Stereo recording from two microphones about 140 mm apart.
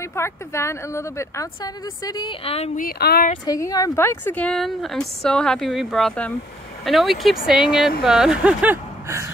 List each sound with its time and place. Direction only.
0.1 s a woman's voice: 20° left (ahead or behind)
2.4 s speech: 45° left (ahead or behind)
2.7 s speech: 70° left (ahead or behind)
3.4 s a woman's voice: 25° left (ahead or behind); by 8.7 s 10° right (ahead or behind)